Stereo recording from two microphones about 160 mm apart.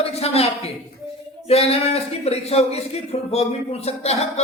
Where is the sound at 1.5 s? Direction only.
40° left (ahead or behind).